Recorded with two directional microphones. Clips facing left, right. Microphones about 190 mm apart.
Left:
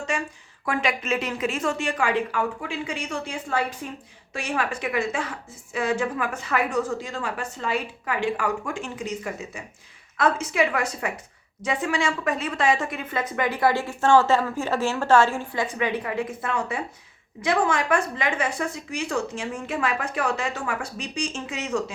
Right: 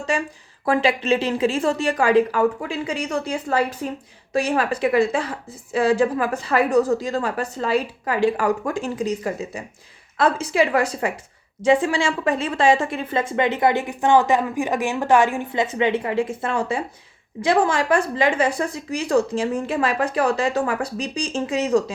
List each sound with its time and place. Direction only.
0.1 s speech: 30° right (ahead or behind)